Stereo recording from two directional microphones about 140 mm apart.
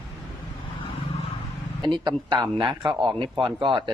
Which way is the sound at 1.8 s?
30° right (ahead or behind).